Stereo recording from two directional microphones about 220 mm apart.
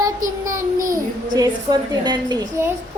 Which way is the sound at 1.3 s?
15° right (ahead or behind).